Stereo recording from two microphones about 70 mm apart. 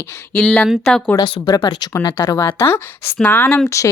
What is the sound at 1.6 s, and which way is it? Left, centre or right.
Speech, left.